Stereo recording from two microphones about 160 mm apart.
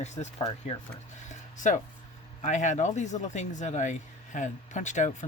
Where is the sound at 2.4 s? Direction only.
50° left (ahead or behind).